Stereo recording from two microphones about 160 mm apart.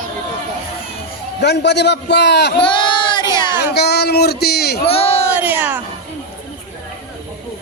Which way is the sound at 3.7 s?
90° left.